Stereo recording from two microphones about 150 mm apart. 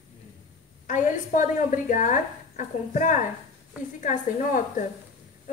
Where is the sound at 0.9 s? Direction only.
55° left (ahead or behind).